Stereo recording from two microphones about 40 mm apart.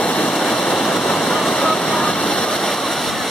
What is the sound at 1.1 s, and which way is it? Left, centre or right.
Vehicle, centre.